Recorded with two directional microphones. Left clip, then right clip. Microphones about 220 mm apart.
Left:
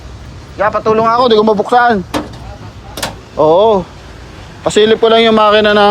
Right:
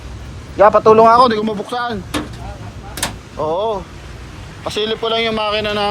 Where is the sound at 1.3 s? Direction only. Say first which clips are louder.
Left 11 dB; 30° left (ahead or behind).